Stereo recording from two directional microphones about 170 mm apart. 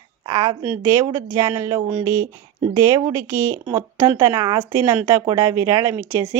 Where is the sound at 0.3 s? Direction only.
20° right (ahead or behind).